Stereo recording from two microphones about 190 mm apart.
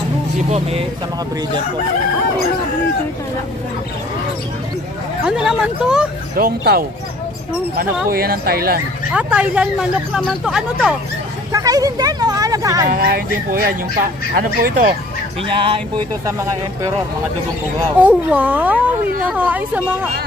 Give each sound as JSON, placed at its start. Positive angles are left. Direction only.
{"t": 0.5, "sound": "speech", "side_deg": -35}
{"t": 5.2, "sound": "speech", "side_deg": -5}
{"t": 6.3, "sound": "speech", "side_deg": -55}
{"t": 9.1, "sound": "speech", "side_deg": -5}
{"t": 11.5, "sound": "speech", "side_deg": -20}
{"t": 12.9, "sound": "speech", "side_deg": -50}
{"t": 15.4, "sound": "speech", "side_deg": -25}
{"t": 16.3, "sound": "speech", "side_deg": -15}
{"t": 17.9, "sound": "speech", "side_deg": -10}